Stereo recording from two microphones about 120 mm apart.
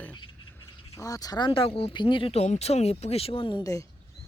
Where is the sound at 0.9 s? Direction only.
30° left (ahead or behind).